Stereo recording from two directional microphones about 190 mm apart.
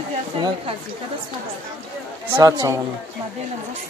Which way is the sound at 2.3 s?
20° right (ahead or behind).